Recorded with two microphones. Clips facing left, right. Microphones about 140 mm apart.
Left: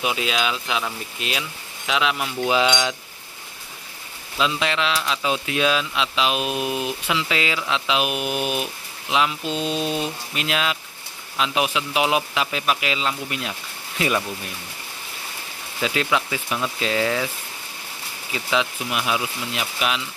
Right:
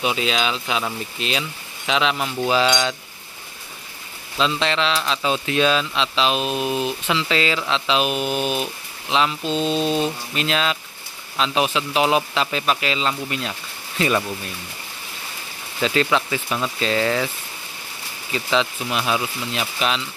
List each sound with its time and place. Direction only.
0.0 s speech: 5° left (ahead or behind)
2.4 s speech: 15° left (ahead or behind)
4.4 s speech: 5° left (ahead or behind)
15.8 s speech: 5° left (ahead or behind)
18.3 s speech: 10° left (ahead or behind)